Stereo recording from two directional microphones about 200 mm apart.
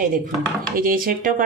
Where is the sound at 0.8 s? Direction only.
45° right (ahead or behind).